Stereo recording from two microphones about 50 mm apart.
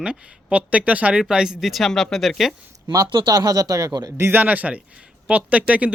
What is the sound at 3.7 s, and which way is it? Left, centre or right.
Speech, right.